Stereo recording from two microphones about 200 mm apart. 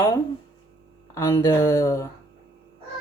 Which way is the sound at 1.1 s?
15° left (ahead or behind).